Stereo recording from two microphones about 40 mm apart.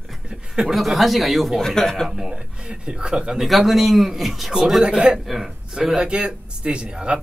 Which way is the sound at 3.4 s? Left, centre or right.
Centre.